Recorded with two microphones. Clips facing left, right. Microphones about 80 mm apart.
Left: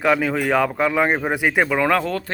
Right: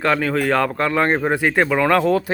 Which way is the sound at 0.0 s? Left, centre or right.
Centre.